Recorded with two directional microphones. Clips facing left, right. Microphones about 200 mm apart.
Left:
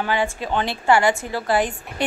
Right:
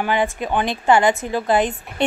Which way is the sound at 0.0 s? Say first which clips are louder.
Right 2 dB; 15° right (ahead or behind).